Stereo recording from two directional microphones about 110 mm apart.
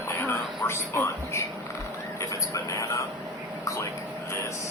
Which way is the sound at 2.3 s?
30° left (ahead or behind).